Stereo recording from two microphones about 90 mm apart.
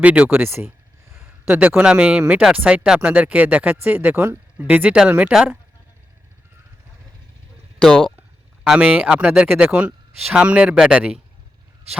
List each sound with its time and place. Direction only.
0.0 s speech: 15° right (ahead or behind)
7.8 s speech: 5° left (ahead or behind)
8.6 s speech: 10° right (ahead or behind)